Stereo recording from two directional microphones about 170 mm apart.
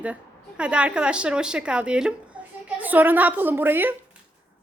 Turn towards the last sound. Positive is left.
turn(degrees=-10)  # may be behind; listen again after turning